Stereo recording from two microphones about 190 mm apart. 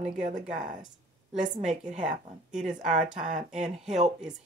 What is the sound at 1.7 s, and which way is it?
Speech, 40° right (ahead or behind).